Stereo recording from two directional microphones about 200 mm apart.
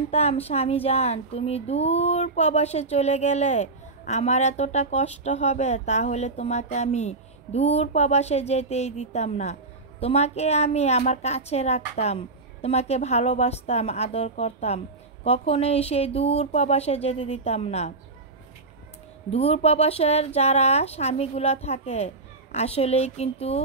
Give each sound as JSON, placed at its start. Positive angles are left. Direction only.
{"t": 0.1, "sound": "speech", "side_deg": 30}
{"t": 19.3, "sound": "speech", "side_deg": 30}